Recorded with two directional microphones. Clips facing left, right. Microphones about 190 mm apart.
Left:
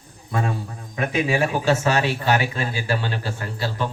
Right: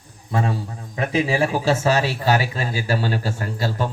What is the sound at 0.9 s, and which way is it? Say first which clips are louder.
Speech: right 1 dB; 30° right (ahead or behind).